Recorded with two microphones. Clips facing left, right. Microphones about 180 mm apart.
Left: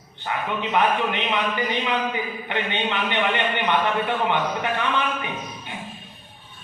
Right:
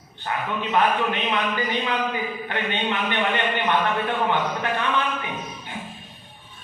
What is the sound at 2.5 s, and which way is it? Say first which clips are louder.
A man's voice: left 1 dB; 20° left (ahead or behind).